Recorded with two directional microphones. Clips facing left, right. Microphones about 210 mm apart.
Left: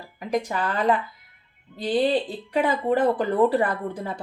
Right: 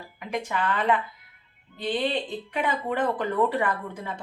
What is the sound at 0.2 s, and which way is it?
A woman's voice, 35° left (ahead or behind).